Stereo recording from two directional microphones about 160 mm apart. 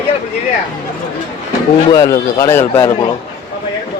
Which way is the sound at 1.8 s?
25° left (ahead or behind).